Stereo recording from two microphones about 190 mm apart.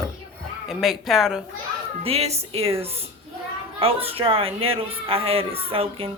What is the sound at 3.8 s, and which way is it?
Speech, 30° right (ahead or behind).